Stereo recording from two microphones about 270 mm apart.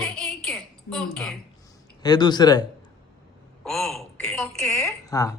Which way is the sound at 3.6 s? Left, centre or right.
Centre.